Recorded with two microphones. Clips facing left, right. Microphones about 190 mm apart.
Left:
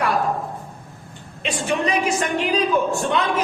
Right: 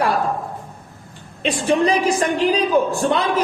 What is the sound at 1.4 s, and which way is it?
Speech, 35° right (ahead or behind).